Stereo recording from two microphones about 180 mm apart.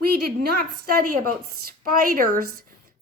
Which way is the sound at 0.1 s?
55° right (ahead or behind).